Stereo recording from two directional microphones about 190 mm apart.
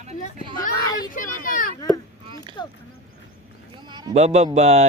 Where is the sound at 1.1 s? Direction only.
45° left (ahead or behind).